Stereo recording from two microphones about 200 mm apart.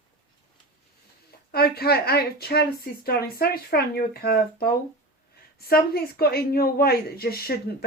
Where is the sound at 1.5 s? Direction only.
50° left (ahead or behind).